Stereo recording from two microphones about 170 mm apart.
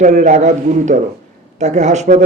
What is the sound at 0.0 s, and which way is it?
A man's voice, 45° right (ahead or behind).